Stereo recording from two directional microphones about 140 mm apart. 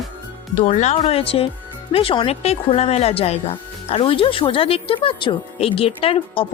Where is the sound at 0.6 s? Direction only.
55° left (ahead or behind).